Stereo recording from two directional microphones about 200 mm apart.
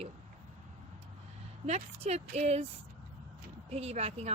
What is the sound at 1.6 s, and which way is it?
Speech, 35° right (ahead or behind).